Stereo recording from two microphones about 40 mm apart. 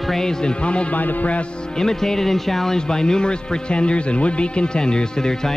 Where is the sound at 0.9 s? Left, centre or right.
Left.